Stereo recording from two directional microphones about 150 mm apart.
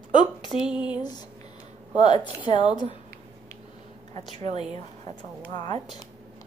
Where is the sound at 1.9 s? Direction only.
50° right (ahead or behind).